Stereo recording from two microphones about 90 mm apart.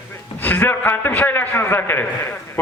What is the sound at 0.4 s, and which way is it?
A man's voice, 20° left (ahead or behind).